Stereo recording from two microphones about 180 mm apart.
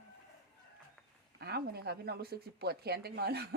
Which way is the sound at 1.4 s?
65° right (ahead or behind).